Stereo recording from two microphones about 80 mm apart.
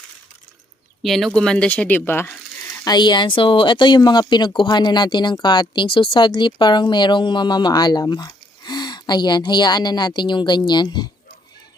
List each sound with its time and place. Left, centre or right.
1.0 s speech: centre; by 2.4 s left
2.7 s speech: left